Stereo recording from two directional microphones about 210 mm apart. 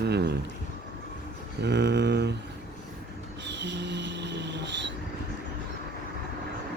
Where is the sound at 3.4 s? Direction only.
55° right (ahead or behind).